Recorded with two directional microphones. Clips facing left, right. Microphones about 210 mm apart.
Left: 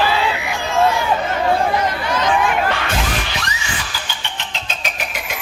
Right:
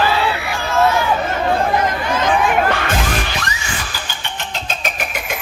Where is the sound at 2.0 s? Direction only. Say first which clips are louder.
Right 1 dB; 50° right (ahead or behind).